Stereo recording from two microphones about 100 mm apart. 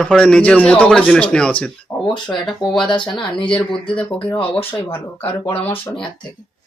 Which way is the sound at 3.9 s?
10° left (ahead or behind).